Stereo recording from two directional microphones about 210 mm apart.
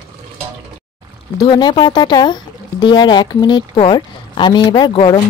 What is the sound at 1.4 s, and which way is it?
Speech, 20° left (ahead or behind).